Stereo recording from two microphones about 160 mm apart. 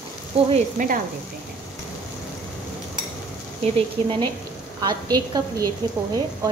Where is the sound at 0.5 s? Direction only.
55° right (ahead or behind).